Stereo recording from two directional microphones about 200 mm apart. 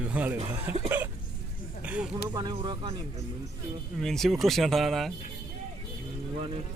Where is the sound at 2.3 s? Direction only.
20° right (ahead or behind).